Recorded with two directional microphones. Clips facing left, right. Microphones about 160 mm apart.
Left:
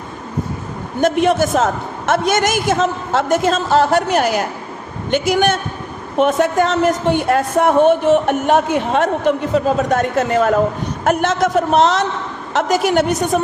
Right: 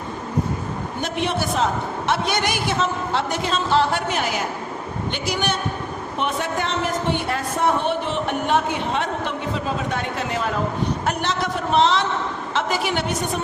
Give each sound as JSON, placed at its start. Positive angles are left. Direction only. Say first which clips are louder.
{"t": 1.0, "sound": "a man's voice", "louder": "left 11 dB", "side_deg": 45}